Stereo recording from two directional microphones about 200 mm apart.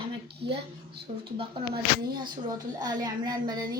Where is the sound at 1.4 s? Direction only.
25° right (ahead or behind).